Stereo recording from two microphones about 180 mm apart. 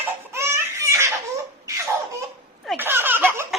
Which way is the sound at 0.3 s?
15° right (ahead or behind).